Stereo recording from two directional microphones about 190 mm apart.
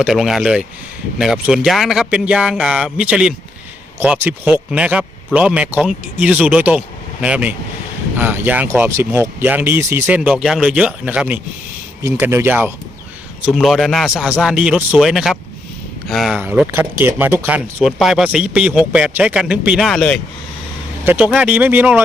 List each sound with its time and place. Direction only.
0.0 s speech: centre (ahead or behind)
13.4 s speech: centre (ahead or behind)
16.4 s speech: 10° right (ahead or behind)